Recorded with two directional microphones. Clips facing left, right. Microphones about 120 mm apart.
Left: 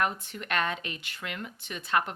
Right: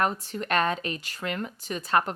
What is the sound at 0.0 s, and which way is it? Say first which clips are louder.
Speech: right 3 dB; 35° right (ahead or behind).